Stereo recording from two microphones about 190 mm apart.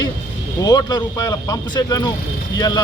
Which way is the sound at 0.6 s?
20° left (ahead or behind).